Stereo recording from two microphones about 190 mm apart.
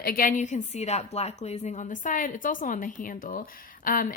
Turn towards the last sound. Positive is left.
turn(degrees=45)  # may be behind; listen again after turning